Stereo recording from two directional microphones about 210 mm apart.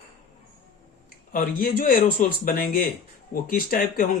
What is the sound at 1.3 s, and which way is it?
Speech, 45° left (ahead or behind).